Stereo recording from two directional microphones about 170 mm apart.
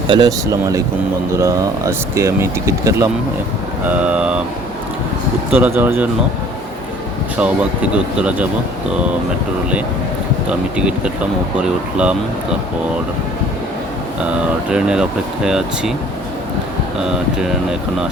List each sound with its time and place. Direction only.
0.1 s speech: 20° right (ahead or behind)
3.8 s speech: 5° right (ahead or behind)
5.5 s speech: 10° right (ahead or behind)
7.3 s speech: 5° right (ahead or behind)
10.5 s speech: 5° right (ahead or behind)
14.7 s speech: 5° right (ahead or behind)
17.0 s speech: 5° right (ahead or behind)